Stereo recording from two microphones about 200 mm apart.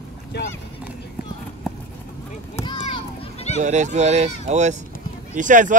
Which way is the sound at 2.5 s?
20° left (ahead or behind).